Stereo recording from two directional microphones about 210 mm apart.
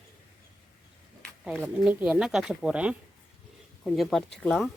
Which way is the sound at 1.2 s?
5° left (ahead or behind).